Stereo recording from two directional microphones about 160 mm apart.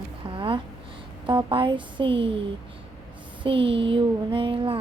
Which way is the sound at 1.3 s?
30° right (ahead or behind).